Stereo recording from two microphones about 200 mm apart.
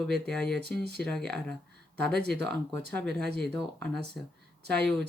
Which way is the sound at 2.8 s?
55° right (ahead or behind).